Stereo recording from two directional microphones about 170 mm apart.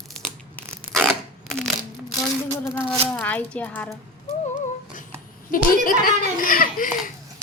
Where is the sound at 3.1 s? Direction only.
10° left (ahead or behind).